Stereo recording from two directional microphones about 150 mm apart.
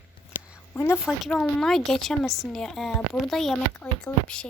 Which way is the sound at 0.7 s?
20° left (ahead or behind).